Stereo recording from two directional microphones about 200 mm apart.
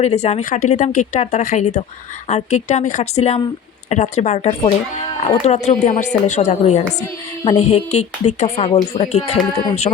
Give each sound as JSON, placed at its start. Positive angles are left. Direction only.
{"t": 0.0, "sound": "speech", "side_deg": 35}